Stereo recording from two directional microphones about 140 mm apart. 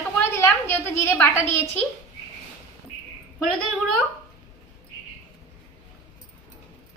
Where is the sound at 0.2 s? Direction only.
20° left (ahead or behind).